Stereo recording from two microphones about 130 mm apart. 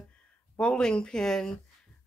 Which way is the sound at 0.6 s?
5° left (ahead or behind).